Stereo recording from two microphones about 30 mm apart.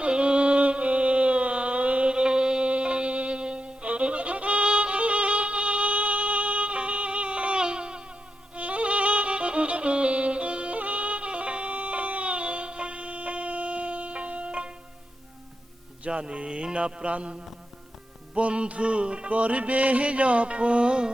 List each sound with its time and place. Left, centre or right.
0.0 s music: right
2.6 s music: right
8.5 s music: right
10.8 s music: right
16.0 s mantra: right
18.3 s music: right
19.3 s carnatic music: right